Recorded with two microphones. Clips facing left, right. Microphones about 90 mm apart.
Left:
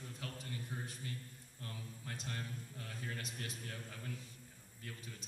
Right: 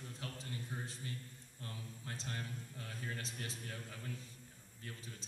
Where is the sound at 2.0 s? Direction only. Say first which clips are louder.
Even; 30° right (ahead or behind).